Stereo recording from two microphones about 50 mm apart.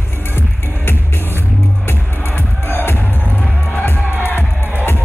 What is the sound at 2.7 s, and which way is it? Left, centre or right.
Music, left.